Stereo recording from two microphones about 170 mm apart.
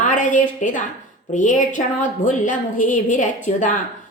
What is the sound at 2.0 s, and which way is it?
A woman's voice, 50° left (ahead or behind).